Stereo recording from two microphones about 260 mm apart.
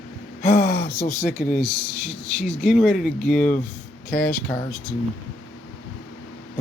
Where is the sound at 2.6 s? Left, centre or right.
Centre.